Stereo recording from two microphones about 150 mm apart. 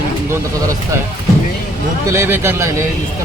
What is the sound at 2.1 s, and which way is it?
Speech, 15° right (ahead or behind).